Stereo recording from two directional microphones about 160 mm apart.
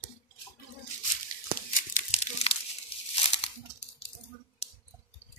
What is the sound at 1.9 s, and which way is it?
Crumpling, 40° left (ahead or behind).